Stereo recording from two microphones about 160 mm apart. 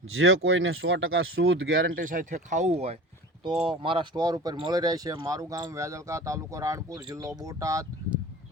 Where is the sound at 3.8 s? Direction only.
30° right (ahead or behind).